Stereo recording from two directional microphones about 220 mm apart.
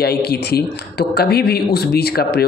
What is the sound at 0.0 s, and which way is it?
Speech, 45° left (ahead or behind).